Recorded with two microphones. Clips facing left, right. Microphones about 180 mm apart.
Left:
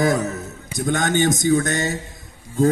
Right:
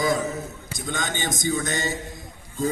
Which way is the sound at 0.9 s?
50° left (ahead or behind).